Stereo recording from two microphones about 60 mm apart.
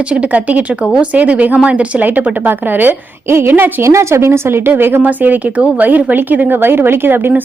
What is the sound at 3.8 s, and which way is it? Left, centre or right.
A woman's voice, right.